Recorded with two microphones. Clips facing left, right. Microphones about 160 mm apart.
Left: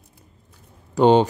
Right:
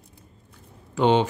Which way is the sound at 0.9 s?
40° left (ahead or behind).